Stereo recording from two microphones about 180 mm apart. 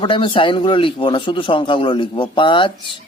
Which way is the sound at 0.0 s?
30° left (ahead or behind).